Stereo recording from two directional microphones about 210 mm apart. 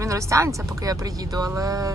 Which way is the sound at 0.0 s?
15° right (ahead or behind).